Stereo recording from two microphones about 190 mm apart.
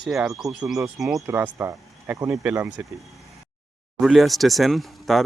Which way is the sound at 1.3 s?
10° right (ahead or behind).